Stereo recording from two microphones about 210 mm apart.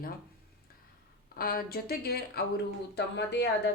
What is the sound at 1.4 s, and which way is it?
A woman's voice, 45° left (ahead or behind).